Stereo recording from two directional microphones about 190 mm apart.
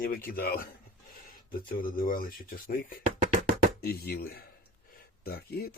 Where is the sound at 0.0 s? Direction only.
50° left (ahead or behind).